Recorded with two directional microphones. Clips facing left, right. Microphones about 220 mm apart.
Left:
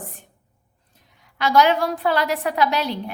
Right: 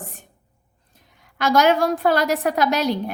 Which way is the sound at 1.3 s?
45° right (ahead or behind).